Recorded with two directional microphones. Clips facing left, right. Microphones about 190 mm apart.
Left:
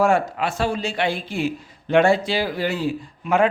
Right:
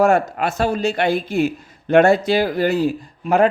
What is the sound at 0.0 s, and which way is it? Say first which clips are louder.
Speech: right 3 dB; 45° right (ahead or behind).